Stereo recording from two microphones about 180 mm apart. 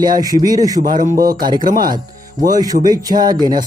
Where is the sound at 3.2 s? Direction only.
25° right (ahead or behind).